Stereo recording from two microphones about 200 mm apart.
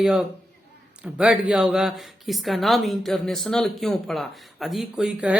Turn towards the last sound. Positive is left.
turn(degrees=-5)  # may be behind; listen again after turning